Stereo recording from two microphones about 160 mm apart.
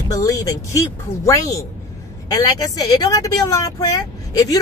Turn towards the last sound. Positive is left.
turn(degrees=20)  # may be behind; listen again after turning